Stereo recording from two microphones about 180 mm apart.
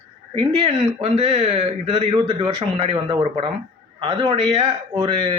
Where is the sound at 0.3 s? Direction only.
35° right (ahead or behind).